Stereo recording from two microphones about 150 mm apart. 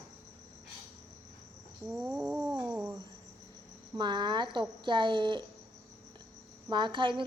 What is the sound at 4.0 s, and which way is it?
Speech, 30° right (ahead or behind).